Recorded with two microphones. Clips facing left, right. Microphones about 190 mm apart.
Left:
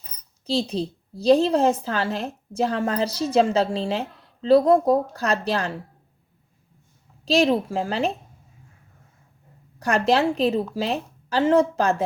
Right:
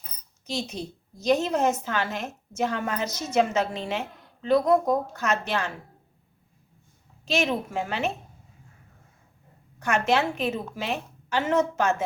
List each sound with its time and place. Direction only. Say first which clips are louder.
0.4 s a woman's voice: left 8 dB; 30° left (ahead or behind)
7.3 s a woman's voice: left 7 dB; 35° left (ahead or behind)
9.7 s a woman's voice: left 3 dB; 35° left (ahead or behind)